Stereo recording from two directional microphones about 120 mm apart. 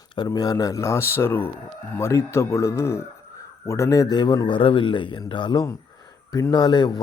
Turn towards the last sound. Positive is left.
turn(degrees=35)  # may be behind; listen again after turning